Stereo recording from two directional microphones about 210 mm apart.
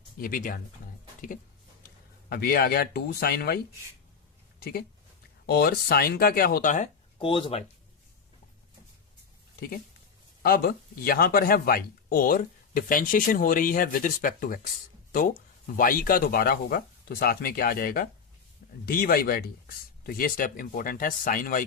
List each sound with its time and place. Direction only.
0.2 s speech: 40° left (ahead or behind)
2.3 s speech: 45° left (ahead or behind)
5.5 s speech: 50° left (ahead or behind)
7.2 s speech: 25° left (ahead or behind)
10.4 s speech: 45° left (ahead or behind)